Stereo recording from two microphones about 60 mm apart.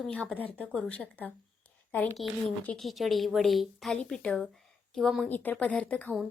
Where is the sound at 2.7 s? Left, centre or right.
Centre.